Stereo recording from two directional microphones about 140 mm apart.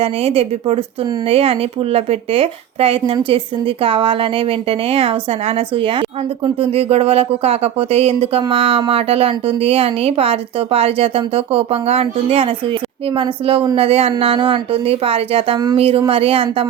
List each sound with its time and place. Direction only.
0.0 s a woman's voice: 45° right (ahead or behind)
15.5 s speech: 30° right (ahead or behind)
15.8 s a woman's voice: 45° right (ahead or behind)